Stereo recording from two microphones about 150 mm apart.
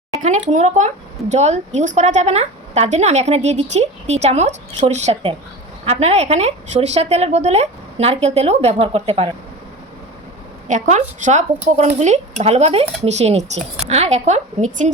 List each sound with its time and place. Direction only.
0.2 s speech: 55° right (ahead or behind)
10.7 s speech: 55° right (ahead or behind)